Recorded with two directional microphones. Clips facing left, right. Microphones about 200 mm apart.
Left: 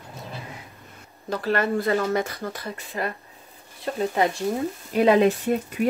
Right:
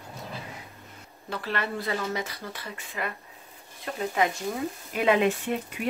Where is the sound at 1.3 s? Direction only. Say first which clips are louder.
Left 8 dB; 40° left (ahead or behind).